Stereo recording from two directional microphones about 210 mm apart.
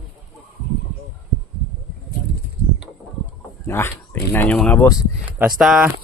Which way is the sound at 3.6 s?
10° left (ahead or behind).